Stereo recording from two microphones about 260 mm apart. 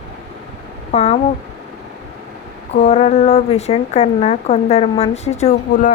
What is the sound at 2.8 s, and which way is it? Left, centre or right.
Speech, left.